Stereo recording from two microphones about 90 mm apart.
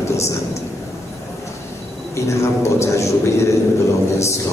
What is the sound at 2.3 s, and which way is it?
A man's voice, 30° left (ahead or behind).